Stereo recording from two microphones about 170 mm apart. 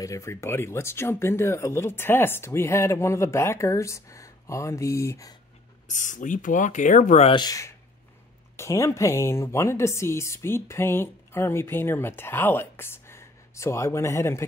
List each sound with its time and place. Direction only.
0.0 s speech: 20° left (ahead or behind)
5.9 s speech: 50° left (ahead or behind)
7.3 s speech: 20° left (ahead or behind)